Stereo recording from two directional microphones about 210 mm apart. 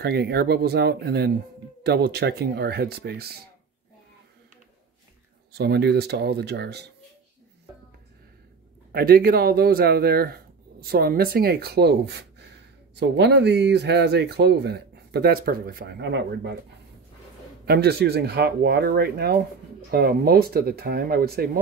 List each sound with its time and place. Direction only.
0.0 s speech: 50° right (ahead or behind)
5.5 s speech: 50° right (ahead or behind)
8.9 s speech: 45° right (ahead or behind)
17.6 s speech: 50° right (ahead or behind)